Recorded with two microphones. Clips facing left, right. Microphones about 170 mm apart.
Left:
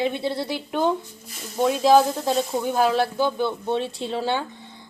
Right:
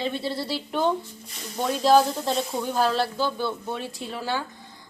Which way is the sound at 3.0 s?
20° left (ahead or behind).